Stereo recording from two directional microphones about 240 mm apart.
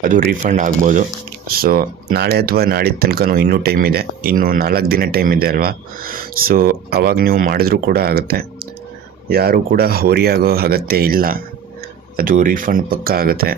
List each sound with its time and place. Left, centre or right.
0.0 s speech: right